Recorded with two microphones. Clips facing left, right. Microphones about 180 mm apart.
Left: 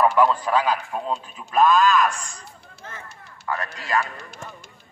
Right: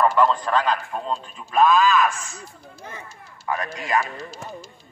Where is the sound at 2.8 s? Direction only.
15° right (ahead or behind).